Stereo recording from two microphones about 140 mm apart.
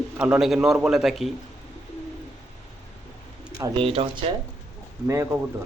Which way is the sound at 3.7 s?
40° right (ahead or behind).